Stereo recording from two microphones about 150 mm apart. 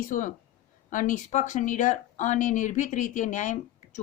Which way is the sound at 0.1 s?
60° left (ahead or behind).